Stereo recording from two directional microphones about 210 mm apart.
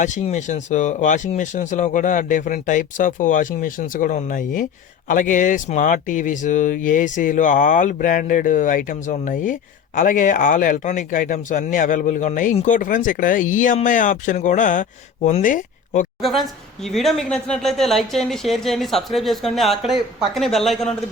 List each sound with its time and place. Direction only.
0.0 s speech: 35° left (ahead or behind)
16.8 s speech: centre (ahead or behind)